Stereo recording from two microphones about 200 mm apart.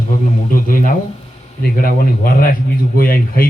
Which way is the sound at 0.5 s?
45° left (ahead or behind).